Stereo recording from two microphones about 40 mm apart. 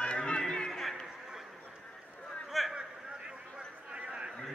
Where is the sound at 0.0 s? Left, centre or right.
Left.